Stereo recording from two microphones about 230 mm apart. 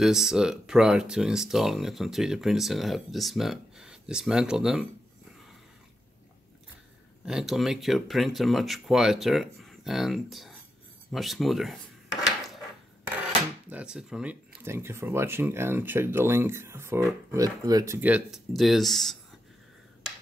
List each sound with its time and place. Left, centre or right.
0.0 s speech: centre
7.2 s speech: centre
12.1 s a sound: centre
13.7 s speech: centre